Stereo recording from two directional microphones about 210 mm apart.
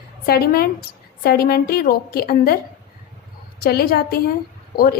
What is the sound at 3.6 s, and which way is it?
Speech, 50° left (ahead or behind).